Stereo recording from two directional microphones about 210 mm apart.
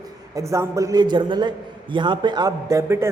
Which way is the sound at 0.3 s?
15° right (ahead or behind).